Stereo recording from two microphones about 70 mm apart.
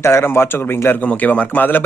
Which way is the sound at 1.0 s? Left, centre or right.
Centre.